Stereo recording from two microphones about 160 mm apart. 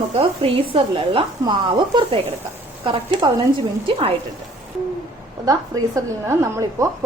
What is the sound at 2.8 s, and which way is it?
Speech, 35° right (ahead or behind).